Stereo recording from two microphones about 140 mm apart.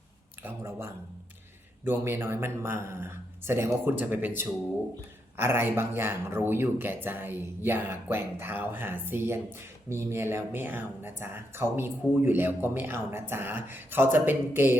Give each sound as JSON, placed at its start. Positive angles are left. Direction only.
{"t": 0.4, "sound": "speech", "side_deg": -20}
{"t": 5.4, "sound": "speech", "side_deg": -15}